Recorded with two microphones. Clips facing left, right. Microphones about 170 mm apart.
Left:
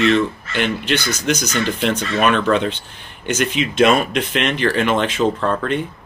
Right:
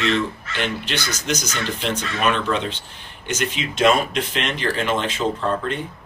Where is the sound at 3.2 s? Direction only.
65° left (ahead or behind).